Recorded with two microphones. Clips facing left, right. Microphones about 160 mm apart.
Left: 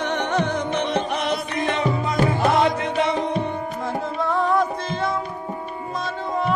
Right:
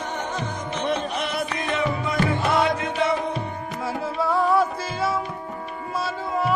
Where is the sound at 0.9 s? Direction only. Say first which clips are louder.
Left 3 dB; 60° left (ahead or behind).